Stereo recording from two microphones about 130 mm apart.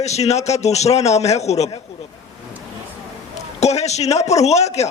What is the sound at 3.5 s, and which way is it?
Speech, 60° left (ahead or behind).